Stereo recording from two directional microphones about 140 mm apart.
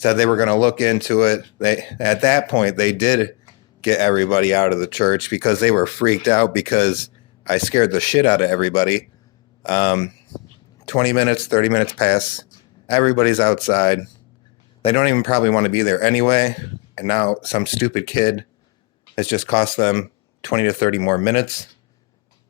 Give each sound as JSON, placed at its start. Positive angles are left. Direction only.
{"t": 0.0, "sound": "speech", "side_deg": 40}
{"t": 10.3, "sound": "a sound", "side_deg": 5}
{"t": 10.8, "sound": "speech", "side_deg": 35}
{"t": 18.0, "sound": "speech", "side_deg": 30}
{"t": 19.1, "sound": "speech", "side_deg": 40}